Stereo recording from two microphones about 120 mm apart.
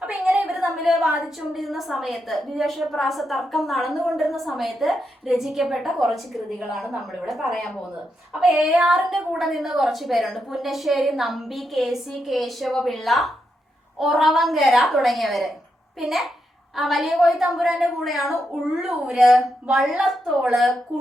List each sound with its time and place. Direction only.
0.0 s a woman's voice: 10° right (ahead or behind)